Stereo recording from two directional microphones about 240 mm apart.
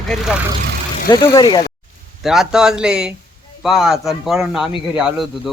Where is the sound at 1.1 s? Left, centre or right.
Centre.